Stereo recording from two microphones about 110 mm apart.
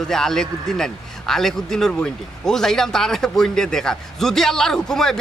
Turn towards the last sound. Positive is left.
turn(degrees=5)  # may be behind; listen again after turning